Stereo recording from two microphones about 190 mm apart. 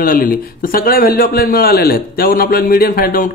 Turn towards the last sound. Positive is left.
turn(degrees=50)  # may be behind; listen again after turning